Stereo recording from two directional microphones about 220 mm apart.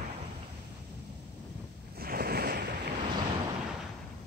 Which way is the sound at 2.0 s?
45° right (ahead or behind).